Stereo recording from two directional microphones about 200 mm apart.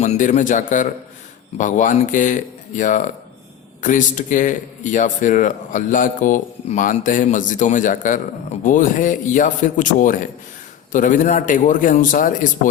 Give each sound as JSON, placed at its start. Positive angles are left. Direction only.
{"t": 0.0, "sound": "a man's voice", "side_deg": 35}